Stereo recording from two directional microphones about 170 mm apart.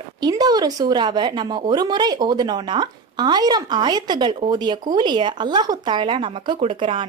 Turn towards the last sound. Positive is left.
turn(degrees=-30)  # may be behind; listen again after turning